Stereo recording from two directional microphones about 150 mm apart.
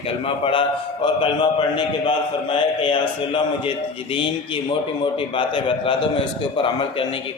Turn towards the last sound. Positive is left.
turn(degrees=35)  # may be behind; listen again after turning